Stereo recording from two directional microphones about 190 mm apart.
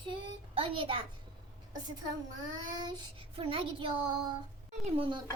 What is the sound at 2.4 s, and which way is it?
Dishes, 20° right (ahead or behind).